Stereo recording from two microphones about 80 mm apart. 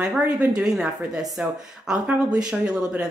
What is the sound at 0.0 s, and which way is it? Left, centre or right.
Speech, centre.